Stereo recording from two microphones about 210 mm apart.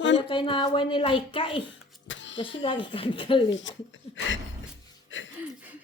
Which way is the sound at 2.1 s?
60° left (ahead or behind).